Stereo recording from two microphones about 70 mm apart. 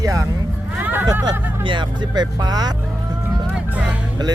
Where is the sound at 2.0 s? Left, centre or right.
Right.